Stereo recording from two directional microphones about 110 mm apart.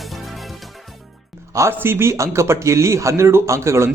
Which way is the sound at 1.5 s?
25° right (ahead or behind).